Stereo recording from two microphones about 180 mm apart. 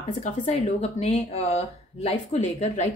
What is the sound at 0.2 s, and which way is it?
Speech, 40° left (ahead or behind).